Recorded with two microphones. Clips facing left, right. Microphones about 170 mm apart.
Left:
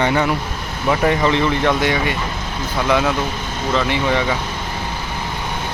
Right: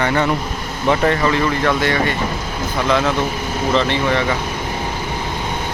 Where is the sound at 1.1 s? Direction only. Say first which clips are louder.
Even; 20° left (ahead or behind).